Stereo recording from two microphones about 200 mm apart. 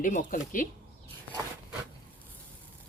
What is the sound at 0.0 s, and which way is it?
Speech, 40° left (ahead or behind).